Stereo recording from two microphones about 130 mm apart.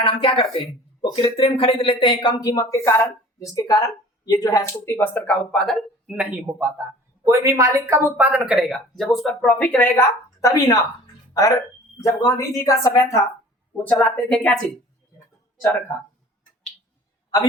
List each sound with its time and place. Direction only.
0.0 s speech: 40° left (ahead or behind)
2.5 s a woman's voice: 25° left (ahead or behind); by 5.8 s 5° left (ahead or behind)
6.1 s a man's voice: 15° right (ahead or behind); by 13.2 s 25° left (ahead or behind)
14.3 s speech: 5° left (ahead or behind)